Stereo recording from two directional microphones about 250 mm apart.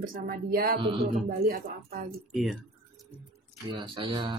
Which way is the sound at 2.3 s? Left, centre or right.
Centre.